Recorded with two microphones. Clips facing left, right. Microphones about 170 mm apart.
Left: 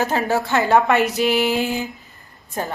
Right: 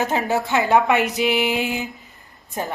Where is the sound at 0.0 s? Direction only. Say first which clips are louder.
Left 1 dB; 20° right (ahead or behind).